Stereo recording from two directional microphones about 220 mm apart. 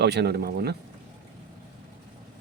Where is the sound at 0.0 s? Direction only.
50° right (ahead or behind).